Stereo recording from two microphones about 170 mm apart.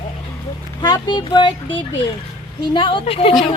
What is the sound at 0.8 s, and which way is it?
Speech, 25° left (ahead or behind).